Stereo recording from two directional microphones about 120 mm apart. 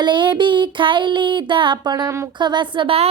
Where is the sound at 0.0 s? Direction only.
40° right (ahead or behind); by 2.3 s 25° right (ahead or behind).